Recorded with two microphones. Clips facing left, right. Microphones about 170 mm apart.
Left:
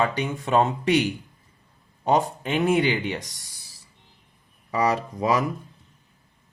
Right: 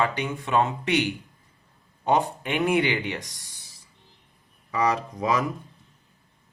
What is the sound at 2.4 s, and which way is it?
Speech, 35° left (ahead or behind).